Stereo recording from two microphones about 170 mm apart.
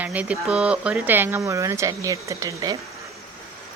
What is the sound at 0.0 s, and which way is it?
Speech, 10° right (ahead or behind).